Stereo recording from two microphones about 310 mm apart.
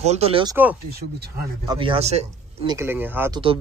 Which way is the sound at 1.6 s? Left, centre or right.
Centre.